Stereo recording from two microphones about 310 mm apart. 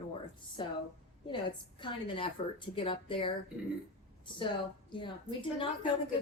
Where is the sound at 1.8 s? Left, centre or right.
Centre.